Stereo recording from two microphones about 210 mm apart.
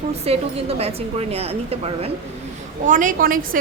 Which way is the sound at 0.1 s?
30° right (ahead or behind).